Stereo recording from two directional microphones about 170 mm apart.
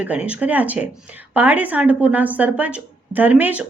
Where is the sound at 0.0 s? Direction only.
10° right (ahead or behind).